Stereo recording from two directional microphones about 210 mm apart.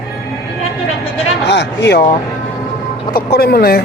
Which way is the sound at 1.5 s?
55° left (ahead or behind).